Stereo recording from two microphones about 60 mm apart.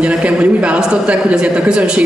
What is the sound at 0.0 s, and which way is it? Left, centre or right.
A woman's voice, right.